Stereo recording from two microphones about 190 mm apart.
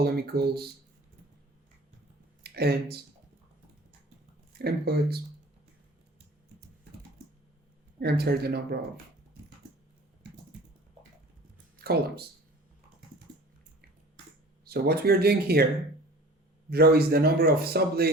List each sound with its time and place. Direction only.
0.0 s speech: 55° right (ahead or behind)
2.4 s speech: 55° right (ahead or behind)
4.5 s speech: 55° right (ahead or behind)
7.9 s speech: 55° right (ahead or behind)
11.8 s speech: 55° right (ahead or behind)
14.6 s speech: 55° right (ahead or behind)
16.6 s speech: 55° right (ahead or behind)